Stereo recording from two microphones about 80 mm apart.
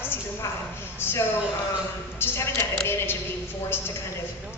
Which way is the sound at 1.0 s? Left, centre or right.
Left.